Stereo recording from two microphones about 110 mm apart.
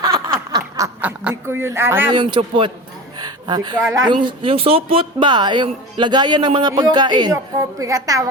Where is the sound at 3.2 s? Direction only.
40° right (ahead or behind).